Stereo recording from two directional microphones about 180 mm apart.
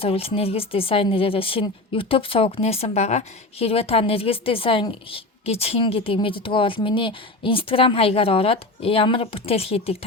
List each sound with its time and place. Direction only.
0.0 s speech: 30° left (ahead or behind)